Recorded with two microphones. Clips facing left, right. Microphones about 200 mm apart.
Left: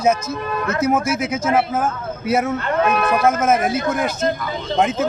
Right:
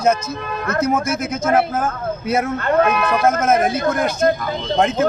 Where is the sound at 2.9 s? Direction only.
45° left (ahead or behind).